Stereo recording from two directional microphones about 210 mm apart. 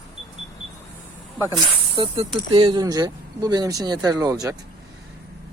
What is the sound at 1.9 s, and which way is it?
Speech, 25° right (ahead or behind).